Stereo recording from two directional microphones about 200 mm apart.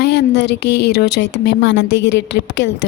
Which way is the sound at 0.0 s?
55° left (ahead or behind).